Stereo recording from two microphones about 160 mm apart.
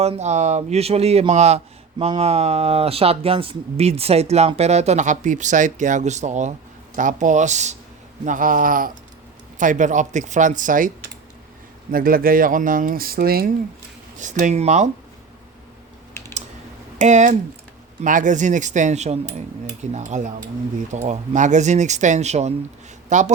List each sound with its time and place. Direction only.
0.0 s speech: 45° right (ahead or behind); by 13.5 s 70° right (ahead or behind)
14.2 s speech: 50° right (ahead or behind)
17.0 s a man's voice: 50° right (ahead or behind)